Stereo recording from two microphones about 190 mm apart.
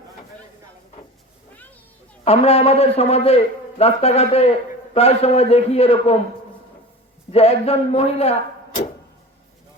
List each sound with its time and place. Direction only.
2.2 s a man's voice: 35° left (ahead or behind)
7.3 s a man's voice: 35° left (ahead or behind)